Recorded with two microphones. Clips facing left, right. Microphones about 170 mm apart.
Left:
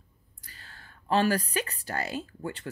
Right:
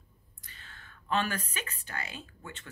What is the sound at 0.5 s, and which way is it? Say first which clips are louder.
Speech: left 2 dB; 35° left (ahead or behind).